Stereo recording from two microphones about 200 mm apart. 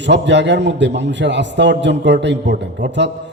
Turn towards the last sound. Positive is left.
turn(degrees=-60)  # may be behind; listen again after turning